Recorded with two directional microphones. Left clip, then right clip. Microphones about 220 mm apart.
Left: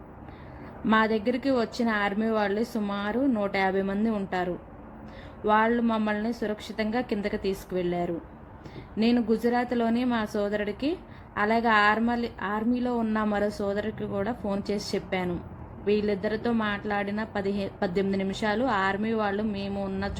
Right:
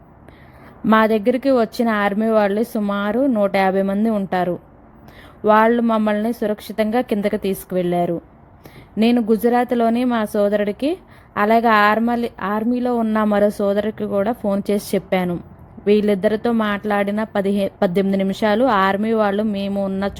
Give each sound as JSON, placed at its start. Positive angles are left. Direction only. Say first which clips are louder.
{"t": 0.9, "sound": "a woman's voice", "louder": "right 9 dB", "side_deg": -45}